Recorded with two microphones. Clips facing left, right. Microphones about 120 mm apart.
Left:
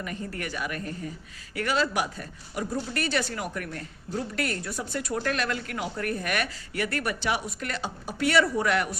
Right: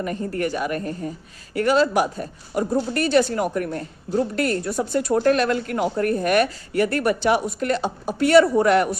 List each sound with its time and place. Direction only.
0.0 s speech: 40° right (ahead or behind)